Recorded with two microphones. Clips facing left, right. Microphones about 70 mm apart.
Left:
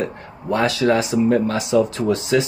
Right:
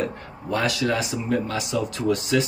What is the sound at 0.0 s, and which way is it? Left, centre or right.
Speech, left.